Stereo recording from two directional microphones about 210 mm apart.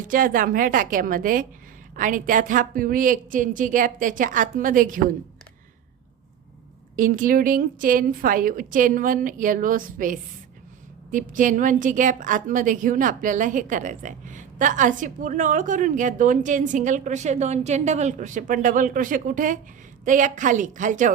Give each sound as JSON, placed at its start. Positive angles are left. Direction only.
{"t": 0.0, "sound": "a woman's voice", "side_deg": -40}
{"t": 6.9, "sound": "a woman's voice", "side_deg": -40}